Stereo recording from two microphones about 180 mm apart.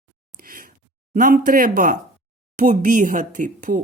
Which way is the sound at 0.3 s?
55° right (ahead or behind).